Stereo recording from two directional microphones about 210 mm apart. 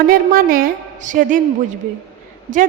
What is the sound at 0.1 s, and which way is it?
A woman's voice, 45° right (ahead or behind).